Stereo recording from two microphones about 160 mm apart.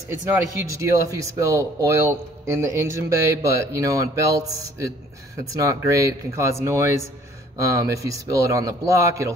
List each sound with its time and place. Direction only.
0.1 s speech: 15° right (ahead or behind)